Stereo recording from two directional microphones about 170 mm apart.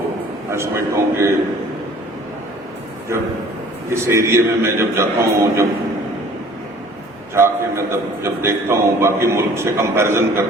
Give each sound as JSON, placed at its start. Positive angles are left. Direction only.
{"t": 0.5, "sound": "a man's voice", "side_deg": -15}
{"t": 3.8, "sound": "a man's voice", "side_deg": -15}
{"t": 7.3, "sound": "a man's voice", "side_deg": -15}